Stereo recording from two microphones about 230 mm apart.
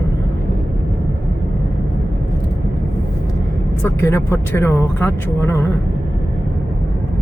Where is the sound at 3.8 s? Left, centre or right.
Centre.